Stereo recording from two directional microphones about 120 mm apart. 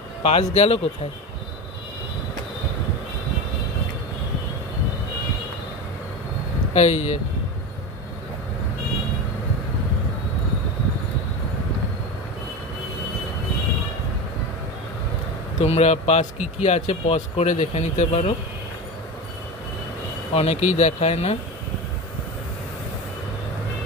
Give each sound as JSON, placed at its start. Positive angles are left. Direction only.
{"t": 0.2, "sound": "speech", "side_deg": 60}
{"t": 6.7, "sound": "speech", "side_deg": 70}
{"t": 15.6, "sound": "speech", "side_deg": 65}
{"t": 20.3, "sound": "speech", "side_deg": 65}